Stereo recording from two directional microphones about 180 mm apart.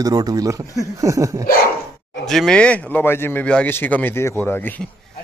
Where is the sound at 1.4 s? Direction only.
55° left (ahead or behind).